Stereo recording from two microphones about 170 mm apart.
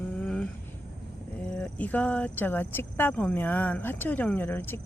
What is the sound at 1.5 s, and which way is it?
Speech, 5° left (ahead or behind).